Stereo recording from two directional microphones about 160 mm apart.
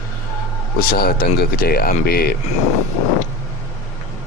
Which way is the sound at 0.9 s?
80° left.